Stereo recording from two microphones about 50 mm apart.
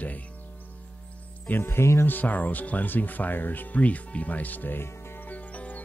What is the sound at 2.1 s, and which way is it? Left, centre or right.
Speech, left.